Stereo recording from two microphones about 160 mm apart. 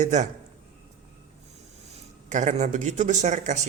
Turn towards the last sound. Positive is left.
turn(degrees=-50)  # may be behind; listen again after turning